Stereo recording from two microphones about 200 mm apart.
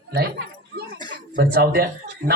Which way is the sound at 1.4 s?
50° right (ahead or behind).